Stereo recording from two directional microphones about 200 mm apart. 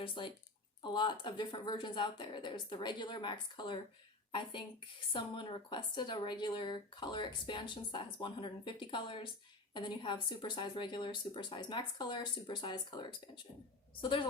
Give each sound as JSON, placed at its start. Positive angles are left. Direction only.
{"t": 0.0, "sound": "a woman's voice", "side_deg": 25}